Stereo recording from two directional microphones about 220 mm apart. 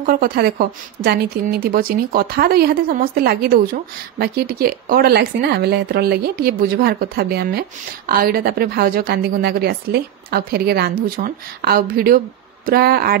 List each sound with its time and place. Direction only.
0.0 s a woman's voice: 40° right (ahead or behind)